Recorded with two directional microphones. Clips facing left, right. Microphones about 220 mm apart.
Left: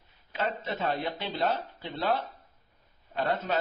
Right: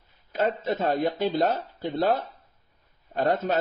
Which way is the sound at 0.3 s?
45° right (ahead or behind).